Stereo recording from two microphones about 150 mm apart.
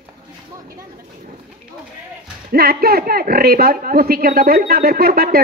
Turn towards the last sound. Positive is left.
turn(degrees=-85)